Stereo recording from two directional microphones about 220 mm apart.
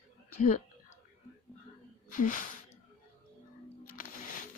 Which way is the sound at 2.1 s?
35° left (ahead or behind).